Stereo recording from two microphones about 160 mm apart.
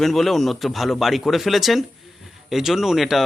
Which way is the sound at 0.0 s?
Centre (ahead or behind).